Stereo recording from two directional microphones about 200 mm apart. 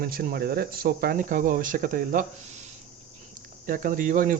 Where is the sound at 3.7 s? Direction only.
45° right (ahead or behind).